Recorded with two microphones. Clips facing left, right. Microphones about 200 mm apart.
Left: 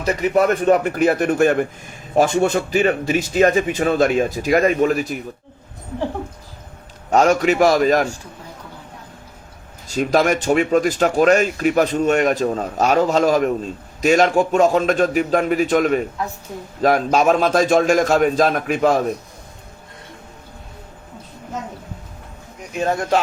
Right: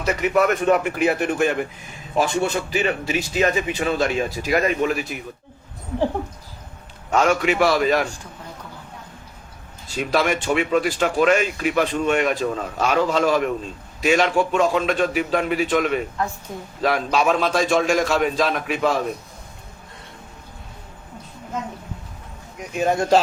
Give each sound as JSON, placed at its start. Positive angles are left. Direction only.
{"t": 0.0, "sound": "speech", "side_deg": 35}
{"t": 7.1, "sound": "speech", "side_deg": 40}
{"t": 9.8, "sound": "speech", "side_deg": 45}